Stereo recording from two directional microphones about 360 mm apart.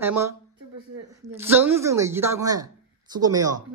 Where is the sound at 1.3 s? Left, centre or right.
Centre.